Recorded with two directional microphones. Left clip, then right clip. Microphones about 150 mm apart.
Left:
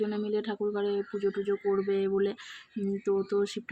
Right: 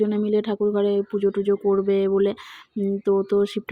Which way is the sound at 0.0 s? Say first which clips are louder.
Right 9 dB; 30° right (ahead or behind).